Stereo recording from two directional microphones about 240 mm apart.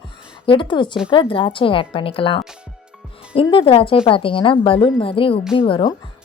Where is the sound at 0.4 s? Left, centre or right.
Centre.